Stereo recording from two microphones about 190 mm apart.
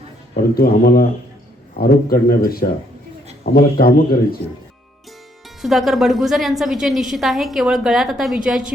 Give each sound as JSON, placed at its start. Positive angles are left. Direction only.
{"t": 0.3, "sound": "a man's voice", "side_deg": 55}
{"t": 5.6, "sound": "a woman's voice", "side_deg": 0}